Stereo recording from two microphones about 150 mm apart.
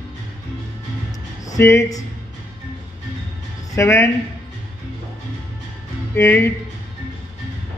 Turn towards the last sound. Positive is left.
turn(degrees=15)  # may be behind; listen again after turning